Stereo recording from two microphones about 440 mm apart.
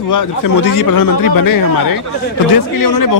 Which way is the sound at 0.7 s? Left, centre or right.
Left.